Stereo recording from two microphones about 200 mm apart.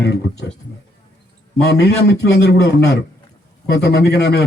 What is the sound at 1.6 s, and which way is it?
Speech, 55° left (ahead or behind).